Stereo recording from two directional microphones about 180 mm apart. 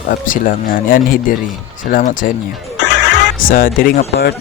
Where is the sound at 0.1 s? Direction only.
50° left (ahead or behind).